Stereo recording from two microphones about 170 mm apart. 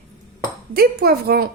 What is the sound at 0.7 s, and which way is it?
Speech, 60° right (ahead or behind).